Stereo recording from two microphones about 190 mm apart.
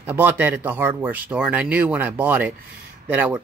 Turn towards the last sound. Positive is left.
turn(degrees=-10)  # may be behind; listen again after turning